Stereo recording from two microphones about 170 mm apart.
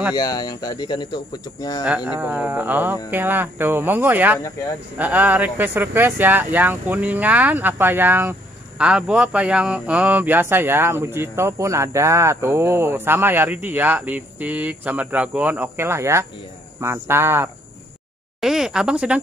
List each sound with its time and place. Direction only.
0.1 s speech: 25° left (ahead or behind)
2.0 s speech: 10° right (ahead or behind)
18.4 s speech: 5° right (ahead or behind)